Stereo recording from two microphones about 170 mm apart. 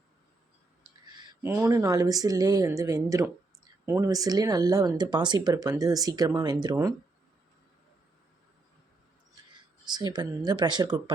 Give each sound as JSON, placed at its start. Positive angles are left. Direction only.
{"t": 1.4, "sound": "speech", "side_deg": -15}
{"t": 9.8, "sound": "speech", "side_deg": -25}